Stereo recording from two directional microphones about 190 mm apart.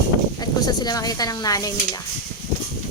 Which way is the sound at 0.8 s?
20° left (ahead or behind).